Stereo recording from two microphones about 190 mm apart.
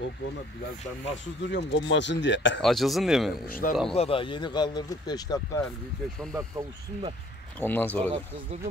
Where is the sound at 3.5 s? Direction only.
50° left (ahead or behind).